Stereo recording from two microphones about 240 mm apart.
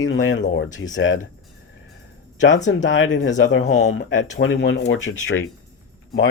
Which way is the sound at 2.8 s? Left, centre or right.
Left.